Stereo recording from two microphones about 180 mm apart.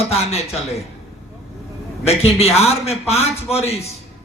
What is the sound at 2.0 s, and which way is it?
Speech, 35° left (ahead or behind).